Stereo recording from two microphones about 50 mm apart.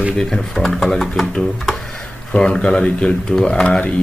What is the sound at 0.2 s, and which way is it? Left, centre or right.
Speech, centre.